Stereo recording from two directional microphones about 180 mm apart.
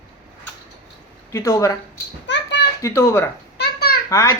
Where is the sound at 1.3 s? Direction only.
15° left (ahead or behind).